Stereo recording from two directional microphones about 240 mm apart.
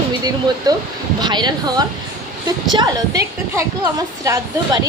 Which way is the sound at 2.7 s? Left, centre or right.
Centre.